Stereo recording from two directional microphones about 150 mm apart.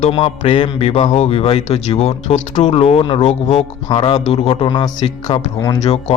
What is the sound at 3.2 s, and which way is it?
Speech, 50° left (ahead or behind).